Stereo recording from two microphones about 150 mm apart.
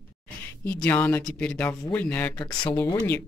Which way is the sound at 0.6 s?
10° left (ahead or behind).